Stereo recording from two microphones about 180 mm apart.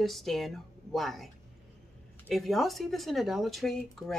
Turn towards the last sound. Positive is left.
turn(degrees=0)  # may be behind; listen again after turning